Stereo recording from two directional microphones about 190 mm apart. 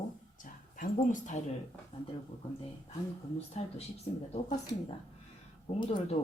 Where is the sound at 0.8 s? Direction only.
40° left (ahead or behind).